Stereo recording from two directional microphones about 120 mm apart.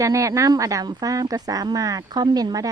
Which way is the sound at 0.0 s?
25° right (ahead or behind).